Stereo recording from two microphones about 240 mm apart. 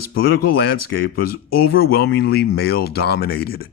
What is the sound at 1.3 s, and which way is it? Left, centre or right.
Speech, left.